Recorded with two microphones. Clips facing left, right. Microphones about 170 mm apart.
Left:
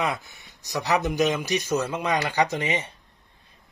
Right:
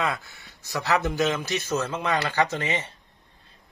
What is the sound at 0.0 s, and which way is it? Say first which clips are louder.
Speech: left 1 dB; 20° left (ahead or behind).